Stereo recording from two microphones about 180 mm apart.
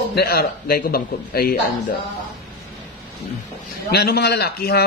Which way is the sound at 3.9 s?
60° left (ahead or behind).